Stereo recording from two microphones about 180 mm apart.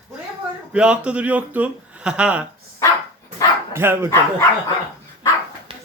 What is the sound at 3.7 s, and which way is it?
Speech, 15° right (ahead or behind).